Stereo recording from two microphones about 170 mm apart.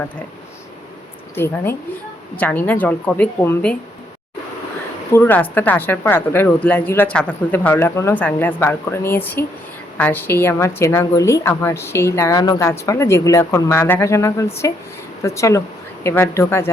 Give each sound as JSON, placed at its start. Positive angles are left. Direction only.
{"t": 2.3, "sound": "a woman's voice", "side_deg": 10}
{"t": 5.1, "sound": "a woman's voice", "side_deg": 10}